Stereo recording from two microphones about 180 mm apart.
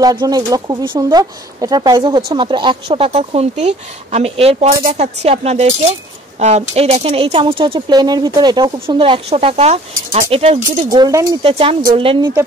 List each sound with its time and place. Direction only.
0.0 s speech: 25° right (ahead or behind)
10.9 s speech: 20° right (ahead or behind)
11.4 s speech: 30° right (ahead or behind)